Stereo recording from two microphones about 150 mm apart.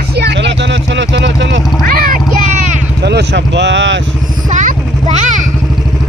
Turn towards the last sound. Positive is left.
turn(degrees=-50)  # may be behind; listen again after turning